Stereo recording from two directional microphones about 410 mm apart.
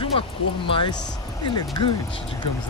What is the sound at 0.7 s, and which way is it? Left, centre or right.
Speech, centre.